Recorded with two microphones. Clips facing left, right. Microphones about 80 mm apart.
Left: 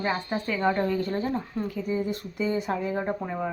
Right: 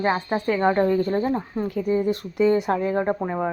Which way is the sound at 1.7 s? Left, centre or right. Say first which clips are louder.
Right 8 dB; right.